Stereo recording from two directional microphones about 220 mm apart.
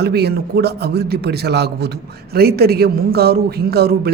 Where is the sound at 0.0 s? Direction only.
45° right (ahead or behind).